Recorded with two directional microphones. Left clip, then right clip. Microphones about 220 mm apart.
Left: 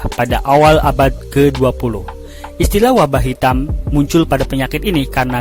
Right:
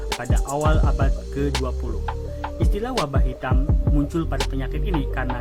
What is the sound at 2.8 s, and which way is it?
Speech, 50° left (ahead or behind).